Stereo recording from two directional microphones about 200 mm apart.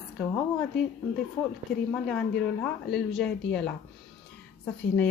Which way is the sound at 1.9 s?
5° left (ahead or behind).